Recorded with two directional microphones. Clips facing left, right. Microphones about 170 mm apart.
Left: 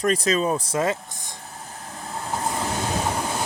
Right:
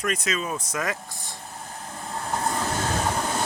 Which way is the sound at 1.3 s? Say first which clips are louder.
Even; centre (ahead or behind).